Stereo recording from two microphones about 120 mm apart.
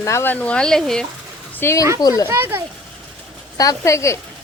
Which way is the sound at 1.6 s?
20° left (ahead or behind).